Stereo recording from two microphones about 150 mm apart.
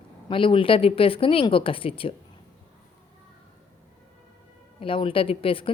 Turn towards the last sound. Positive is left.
turn(degrees=35)  # may be behind; listen again after turning